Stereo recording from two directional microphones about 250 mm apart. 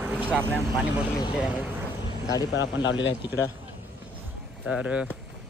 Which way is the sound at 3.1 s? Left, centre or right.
Centre.